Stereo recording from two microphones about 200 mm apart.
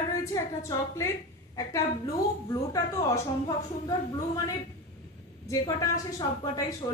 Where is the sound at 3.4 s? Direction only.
20° left (ahead or behind).